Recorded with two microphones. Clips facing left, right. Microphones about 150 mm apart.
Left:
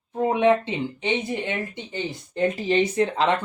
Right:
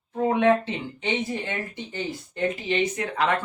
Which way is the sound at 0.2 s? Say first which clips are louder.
Left 1 dB; 15° left (ahead or behind).